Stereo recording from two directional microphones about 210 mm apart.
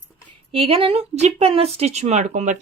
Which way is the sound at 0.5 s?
25° right (ahead or behind).